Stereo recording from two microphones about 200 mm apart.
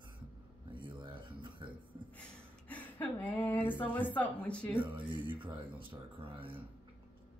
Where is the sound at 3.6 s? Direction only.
25° left (ahead or behind).